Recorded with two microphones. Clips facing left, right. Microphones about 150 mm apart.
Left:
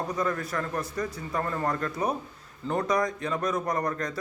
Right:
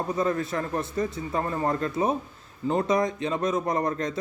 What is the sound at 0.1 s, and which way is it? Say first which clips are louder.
A man's voice: right 3 dB; 25° right (ahead or behind).